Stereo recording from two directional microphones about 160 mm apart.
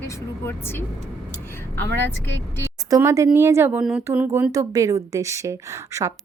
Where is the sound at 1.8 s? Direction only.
15° left (ahead or behind).